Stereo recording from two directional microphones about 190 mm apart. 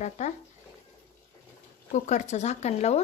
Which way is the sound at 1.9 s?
40° left (ahead or behind).